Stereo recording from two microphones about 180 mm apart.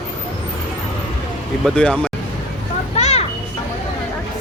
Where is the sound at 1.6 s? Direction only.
5° left (ahead or behind).